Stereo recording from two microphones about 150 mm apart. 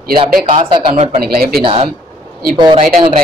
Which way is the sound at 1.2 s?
90° right.